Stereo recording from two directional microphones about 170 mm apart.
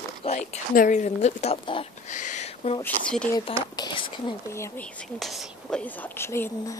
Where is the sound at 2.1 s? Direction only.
45° left (ahead or behind).